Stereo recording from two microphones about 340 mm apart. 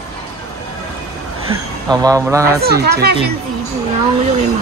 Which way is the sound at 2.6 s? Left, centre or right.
Right.